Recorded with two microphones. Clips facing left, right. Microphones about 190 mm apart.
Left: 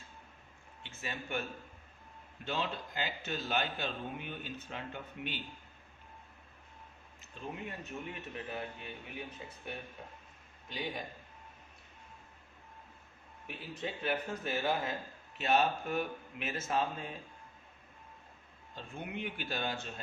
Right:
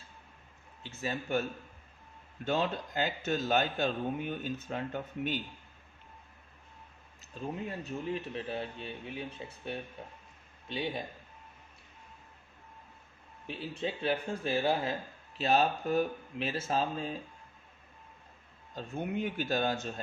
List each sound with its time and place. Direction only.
0.8 s a man's voice: 35° right (ahead or behind)
7.2 s speech: 35° right (ahead or behind)
13.5 s speech: 30° right (ahead or behind)
18.7 s speech: 40° right (ahead or behind)